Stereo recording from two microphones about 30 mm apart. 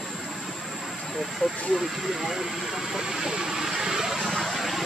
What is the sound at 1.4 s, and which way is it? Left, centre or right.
Speech, centre.